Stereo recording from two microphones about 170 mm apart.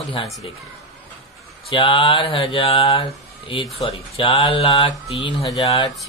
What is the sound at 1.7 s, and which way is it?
Speech, 30° left (ahead or behind).